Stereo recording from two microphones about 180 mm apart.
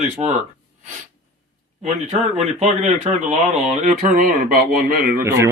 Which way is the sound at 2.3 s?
40° right (ahead or behind).